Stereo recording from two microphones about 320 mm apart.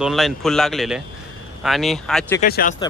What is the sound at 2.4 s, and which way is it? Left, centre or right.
Speech, left.